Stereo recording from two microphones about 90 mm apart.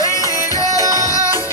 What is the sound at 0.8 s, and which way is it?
Music, 40° right (ahead or behind).